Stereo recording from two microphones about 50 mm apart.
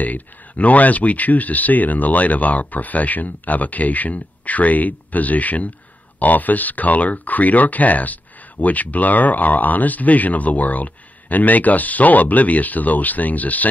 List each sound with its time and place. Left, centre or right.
0.0 s speech: left